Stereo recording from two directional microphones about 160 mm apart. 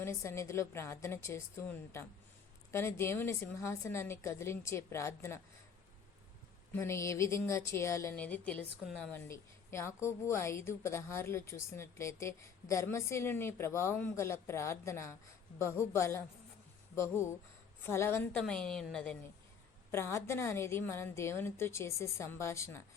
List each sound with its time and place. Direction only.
0.0 s a woman's voice: 15° left (ahead or behind)
2.7 s a woman's voice: 15° left (ahead or behind)
6.7 s a woman's voice: 15° left (ahead or behind)
9.1 s a woman's voice: 15° left (ahead or behind)
18.3 s a woman's voice: 5° left (ahead or behind)
19.9 s a woman's voice: 15° left (ahead or behind)